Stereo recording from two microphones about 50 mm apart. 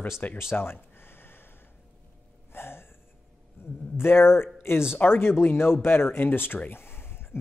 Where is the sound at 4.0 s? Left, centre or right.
Left.